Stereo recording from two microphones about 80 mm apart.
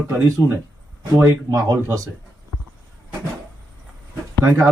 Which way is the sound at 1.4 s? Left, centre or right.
Right.